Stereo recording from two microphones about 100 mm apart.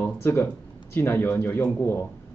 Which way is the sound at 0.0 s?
25° left (ahead or behind).